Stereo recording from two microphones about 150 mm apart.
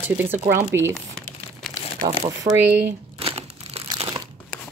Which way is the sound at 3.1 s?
40° right (ahead or behind).